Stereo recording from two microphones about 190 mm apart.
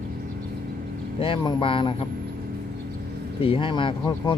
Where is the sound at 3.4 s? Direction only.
25° left (ahead or behind).